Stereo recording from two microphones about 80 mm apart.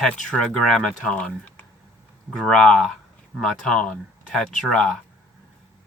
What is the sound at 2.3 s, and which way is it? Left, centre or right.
Speech, centre.